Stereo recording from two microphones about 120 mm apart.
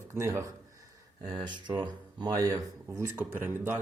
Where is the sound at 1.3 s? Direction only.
40° right (ahead or behind).